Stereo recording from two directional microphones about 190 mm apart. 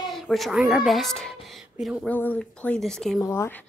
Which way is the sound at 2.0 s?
10° left (ahead or behind).